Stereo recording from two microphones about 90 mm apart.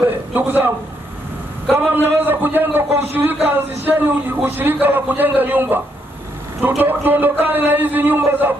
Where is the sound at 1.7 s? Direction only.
20° right (ahead or behind).